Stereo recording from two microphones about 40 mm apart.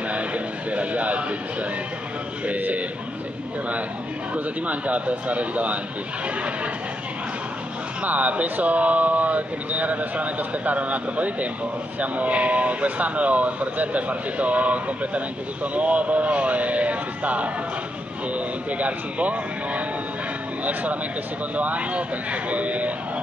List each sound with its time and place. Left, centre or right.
0.1 s speech: right
4.3 s speech: right
8.0 s speech: right